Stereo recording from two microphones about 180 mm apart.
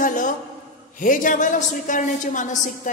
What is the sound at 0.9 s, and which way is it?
A woman's voice, 45° left (ahead or behind).